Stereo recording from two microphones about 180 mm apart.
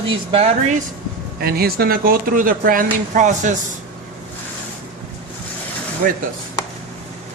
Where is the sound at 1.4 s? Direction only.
60° right (ahead or behind).